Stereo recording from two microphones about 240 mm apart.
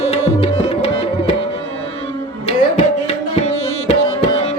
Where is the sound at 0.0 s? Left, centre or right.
Left.